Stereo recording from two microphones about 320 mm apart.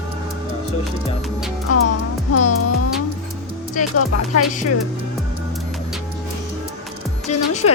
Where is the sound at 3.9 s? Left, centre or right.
Left.